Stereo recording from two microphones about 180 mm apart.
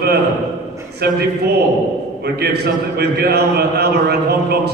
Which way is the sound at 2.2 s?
60° right (ahead or behind).